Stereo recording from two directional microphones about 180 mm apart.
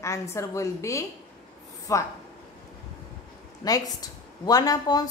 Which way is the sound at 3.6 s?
20° left (ahead or behind).